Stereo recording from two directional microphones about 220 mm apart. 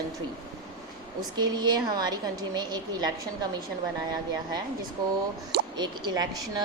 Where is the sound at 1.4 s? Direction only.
20° right (ahead or behind).